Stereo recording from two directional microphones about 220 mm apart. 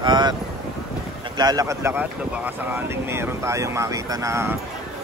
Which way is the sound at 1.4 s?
15° right (ahead or behind).